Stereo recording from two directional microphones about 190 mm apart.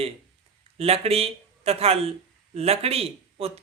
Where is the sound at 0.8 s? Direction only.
30° right (ahead or behind).